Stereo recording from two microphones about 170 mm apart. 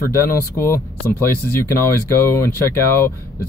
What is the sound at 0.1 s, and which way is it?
Speech, 15° left (ahead or behind).